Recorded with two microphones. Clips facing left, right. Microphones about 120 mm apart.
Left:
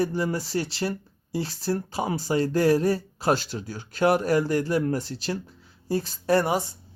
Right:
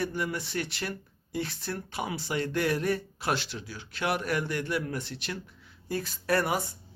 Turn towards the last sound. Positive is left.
turn(degrees=25)  # may be behind; listen again after turning